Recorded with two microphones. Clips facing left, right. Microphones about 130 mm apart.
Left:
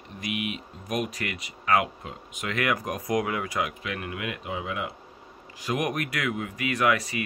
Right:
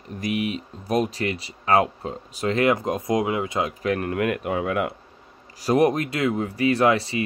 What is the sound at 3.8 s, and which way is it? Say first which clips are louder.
Speech: right 10 dB; 40° right (ahead or behind).